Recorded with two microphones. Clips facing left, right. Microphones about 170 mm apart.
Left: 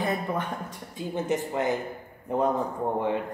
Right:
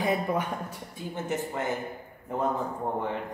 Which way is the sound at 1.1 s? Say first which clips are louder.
Left 4 dB; 20° left (ahead or behind).